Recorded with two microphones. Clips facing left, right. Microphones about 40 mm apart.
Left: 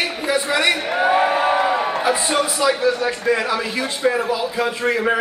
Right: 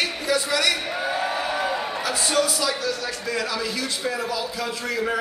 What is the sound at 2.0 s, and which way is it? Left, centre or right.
A man's voice, left.